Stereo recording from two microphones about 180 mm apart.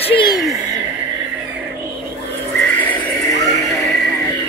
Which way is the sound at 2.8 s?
10° left (ahead or behind).